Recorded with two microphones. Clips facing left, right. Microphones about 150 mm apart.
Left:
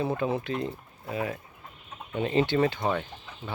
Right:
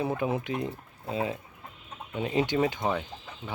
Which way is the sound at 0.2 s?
15° right (ahead or behind).